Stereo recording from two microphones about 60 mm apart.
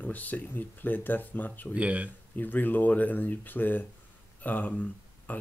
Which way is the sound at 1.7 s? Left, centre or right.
Right.